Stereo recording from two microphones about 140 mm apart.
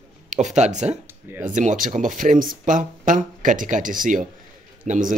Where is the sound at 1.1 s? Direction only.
15° right (ahead or behind).